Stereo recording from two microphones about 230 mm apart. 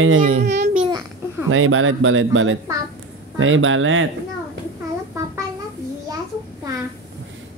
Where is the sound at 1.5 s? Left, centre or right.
Right.